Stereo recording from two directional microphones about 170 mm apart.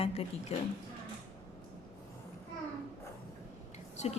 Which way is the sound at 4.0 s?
40° left (ahead or behind).